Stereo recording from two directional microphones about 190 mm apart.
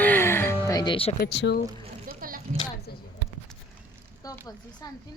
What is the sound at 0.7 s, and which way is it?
Music, 25° left (ahead or behind).